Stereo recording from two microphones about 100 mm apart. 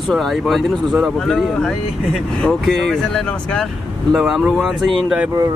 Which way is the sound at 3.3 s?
10° left (ahead or behind).